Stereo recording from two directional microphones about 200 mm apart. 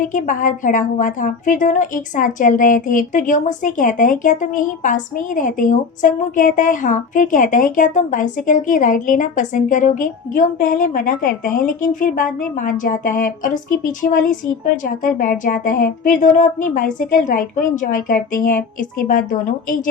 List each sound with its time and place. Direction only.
0.0 s a woman's voice: 40° left (ahead or behind)